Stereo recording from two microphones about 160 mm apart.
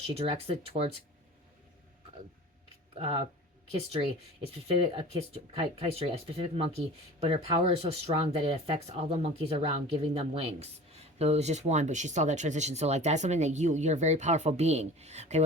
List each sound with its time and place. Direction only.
0.0 s speech: 35° right (ahead or behind)
3.0 s speech: 35° right (ahead or behind)